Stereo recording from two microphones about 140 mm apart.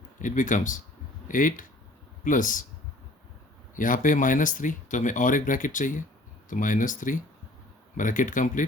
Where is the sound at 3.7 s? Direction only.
70° left (ahead or behind).